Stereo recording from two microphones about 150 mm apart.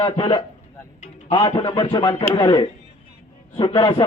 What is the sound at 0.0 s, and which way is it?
A man's voice, 30° left (ahead or behind).